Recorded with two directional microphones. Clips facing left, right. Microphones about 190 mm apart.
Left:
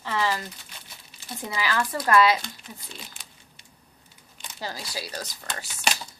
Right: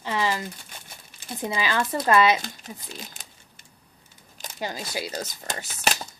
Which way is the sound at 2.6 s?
45° right (ahead or behind).